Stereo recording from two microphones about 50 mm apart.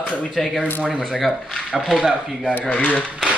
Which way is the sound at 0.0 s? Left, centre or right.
Left.